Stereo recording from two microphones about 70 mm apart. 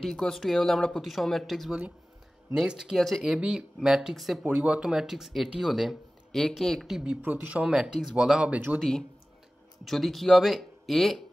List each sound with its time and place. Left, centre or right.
0.0 s speech: centre
3.3 s speech: centre
4.5 s speech: centre
7.2 s speech: right
9.8 s speech: centre